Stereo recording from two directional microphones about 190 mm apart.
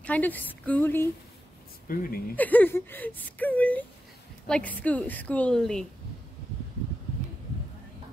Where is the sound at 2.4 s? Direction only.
10° left (ahead or behind).